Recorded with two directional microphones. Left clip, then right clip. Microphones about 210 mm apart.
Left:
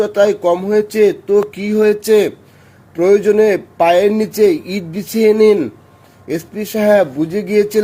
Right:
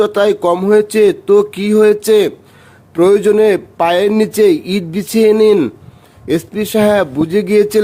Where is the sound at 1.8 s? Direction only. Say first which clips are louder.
Left 1 dB; 35° right (ahead or behind).